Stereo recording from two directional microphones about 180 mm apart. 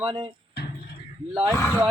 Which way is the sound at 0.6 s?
65° left (ahead or behind).